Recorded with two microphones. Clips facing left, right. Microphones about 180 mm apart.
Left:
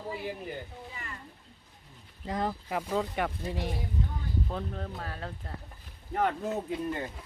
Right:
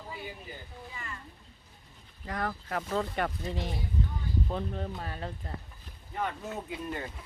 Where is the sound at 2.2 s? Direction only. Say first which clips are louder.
Left 3 dB; 20° left (ahead or behind).